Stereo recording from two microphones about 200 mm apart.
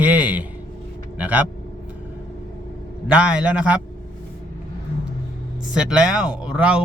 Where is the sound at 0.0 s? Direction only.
5° right (ahead or behind).